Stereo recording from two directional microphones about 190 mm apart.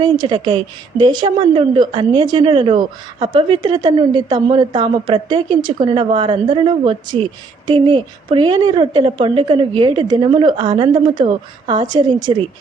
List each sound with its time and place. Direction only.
0.0 s a woman's voice: 25° right (ahead or behind)